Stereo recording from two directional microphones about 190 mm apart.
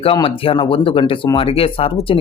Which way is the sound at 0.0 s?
30° left (ahead or behind).